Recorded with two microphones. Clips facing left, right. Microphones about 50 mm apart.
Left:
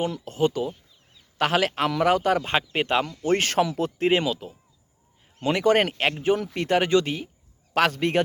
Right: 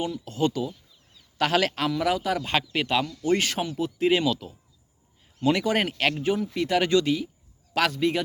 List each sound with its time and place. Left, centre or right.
0.0 s speech: left
1.1 s a sound: left
1.9 s speech: left
2.4 s speech: left
3.6 s speech: left
3.9 s speech: left
4.3 s speech: left
5.6 s speech: left
6.0 s speech: left
6.5 s speech: left
6.7 s a man's voice: left
7.9 s a man's voice: left